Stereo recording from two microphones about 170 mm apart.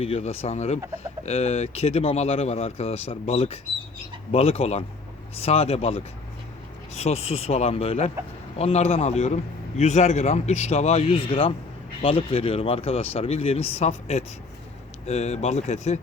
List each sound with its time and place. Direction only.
0.0 s a man's voice: 35° left (ahead or behind)